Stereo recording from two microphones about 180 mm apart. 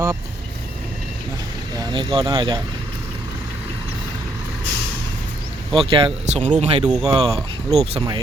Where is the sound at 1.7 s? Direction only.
25° right (ahead or behind).